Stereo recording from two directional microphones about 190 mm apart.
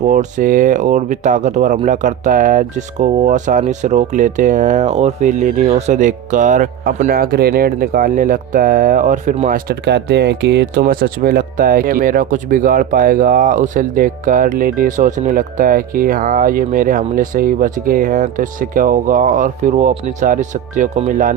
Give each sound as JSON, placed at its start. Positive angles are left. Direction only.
{"t": 0.1, "sound": "speech", "side_deg": -45}
{"t": 9.6, "sound": "speech", "side_deg": -60}